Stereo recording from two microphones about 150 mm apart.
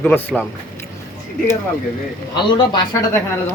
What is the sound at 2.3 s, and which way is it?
Speech, 30° left (ahead or behind).